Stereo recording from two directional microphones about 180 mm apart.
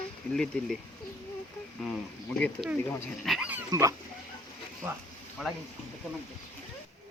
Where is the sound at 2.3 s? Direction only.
5° left (ahead or behind); by 3.9 s 15° right (ahead or behind).